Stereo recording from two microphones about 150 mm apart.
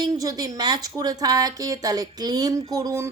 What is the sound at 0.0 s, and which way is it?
Speech, 25° right (ahead or behind).